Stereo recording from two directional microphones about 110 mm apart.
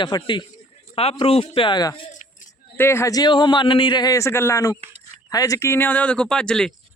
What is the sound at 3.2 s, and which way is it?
A man's voice, 45° left (ahead or behind).